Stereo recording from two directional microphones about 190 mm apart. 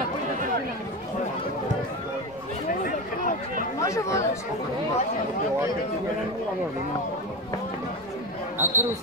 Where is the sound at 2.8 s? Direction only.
45° left (ahead or behind).